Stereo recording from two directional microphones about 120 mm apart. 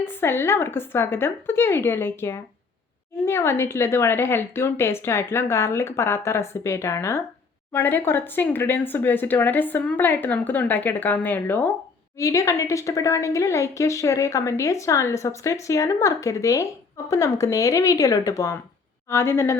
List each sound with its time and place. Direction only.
0.0 s a woman's voice: 20° left (ahead or behind)
12.1 s a woman's voice: 25° left (ahead or behind)